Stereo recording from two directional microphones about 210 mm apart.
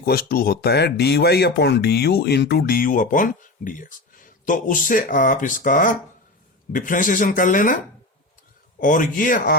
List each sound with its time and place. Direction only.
0.0 s speech: 45° left (ahead or behind)
8.8 s speech: 40° left (ahead or behind)